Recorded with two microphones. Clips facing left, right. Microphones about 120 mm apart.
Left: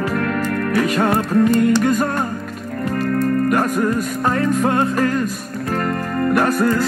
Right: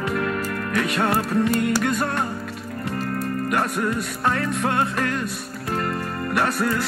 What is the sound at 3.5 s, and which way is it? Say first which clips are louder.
Music: left 5 dB; 45° left (ahead or behind).